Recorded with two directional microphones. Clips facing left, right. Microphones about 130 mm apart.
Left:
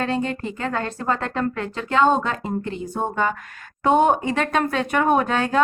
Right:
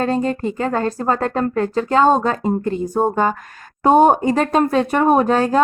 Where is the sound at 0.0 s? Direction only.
40° right (ahead or behind).